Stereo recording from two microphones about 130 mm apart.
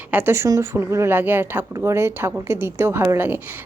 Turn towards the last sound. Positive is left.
turn(degrees=-15)  # may be behind; listen again after turning